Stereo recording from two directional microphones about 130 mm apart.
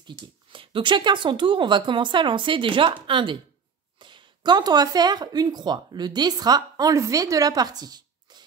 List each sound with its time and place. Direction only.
0.0 s speech: 40° right (ahead or behind)